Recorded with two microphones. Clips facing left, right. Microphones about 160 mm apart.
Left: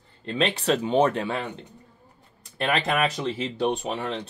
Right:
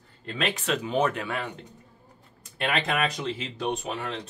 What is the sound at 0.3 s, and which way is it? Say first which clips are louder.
Speech: left 5 dB; 30° left (ahead or behind).